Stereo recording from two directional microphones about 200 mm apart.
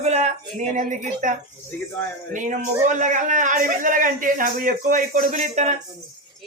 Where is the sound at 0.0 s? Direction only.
35° right (ahead or behind).